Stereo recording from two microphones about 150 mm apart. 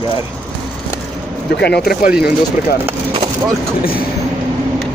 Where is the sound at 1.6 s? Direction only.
90° left.